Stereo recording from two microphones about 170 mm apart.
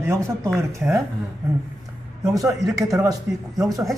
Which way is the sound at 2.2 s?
20° right (ahead or behind).